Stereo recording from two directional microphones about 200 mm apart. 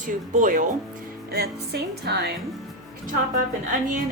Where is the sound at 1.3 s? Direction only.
55° right (ahead or behind).